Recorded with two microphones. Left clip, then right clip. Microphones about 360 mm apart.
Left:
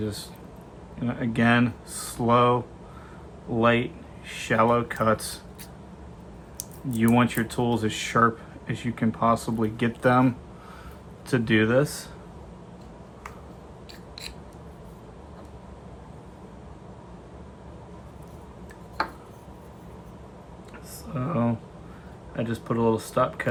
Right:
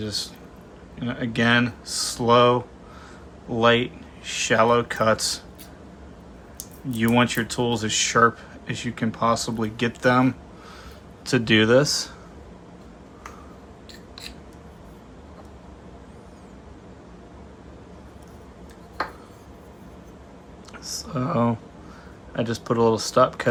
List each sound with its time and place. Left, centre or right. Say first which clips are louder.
0.0 s speech: right 4 dB; centre
3.6 s speech: right 3 dB; centre
6.9 s speech: right 2 dB; centre
21.1 s a sound: right 4 dB; centre
22.4 s speech: right 5 dB; centre